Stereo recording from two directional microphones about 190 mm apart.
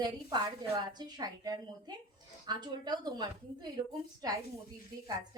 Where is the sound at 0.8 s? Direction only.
20° right (ahead or behind).